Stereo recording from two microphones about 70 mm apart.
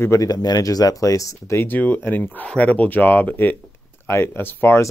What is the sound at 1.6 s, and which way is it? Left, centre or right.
Speech, left.